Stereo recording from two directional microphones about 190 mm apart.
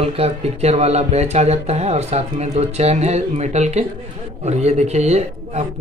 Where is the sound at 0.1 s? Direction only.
35° right (ahead or behind).